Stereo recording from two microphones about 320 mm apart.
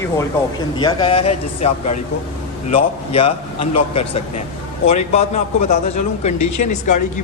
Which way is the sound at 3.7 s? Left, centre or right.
Centre.